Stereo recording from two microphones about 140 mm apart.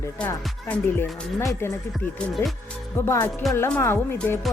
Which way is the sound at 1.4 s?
20° left (ahead or behind).